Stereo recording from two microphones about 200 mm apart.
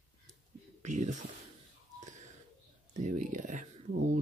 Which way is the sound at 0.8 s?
35° right (ahead or behind).